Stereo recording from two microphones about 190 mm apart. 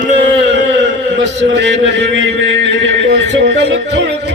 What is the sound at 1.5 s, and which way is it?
A man's voice, 70° right (ahead or behind).